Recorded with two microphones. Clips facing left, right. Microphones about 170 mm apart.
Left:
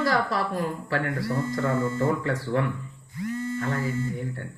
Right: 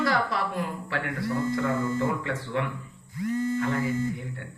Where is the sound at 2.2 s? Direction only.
40° left (ahead or behind).